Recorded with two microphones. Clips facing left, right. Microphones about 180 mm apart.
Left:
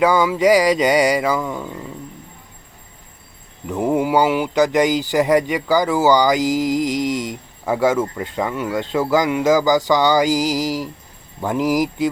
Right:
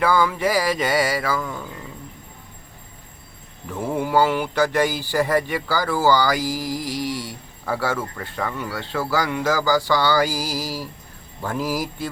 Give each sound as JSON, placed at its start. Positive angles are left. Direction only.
{"t": 0.0, "sound": "speech", "side_deg": 15}
{"t": 3.7, "sound": "speech", "side_deg": 15}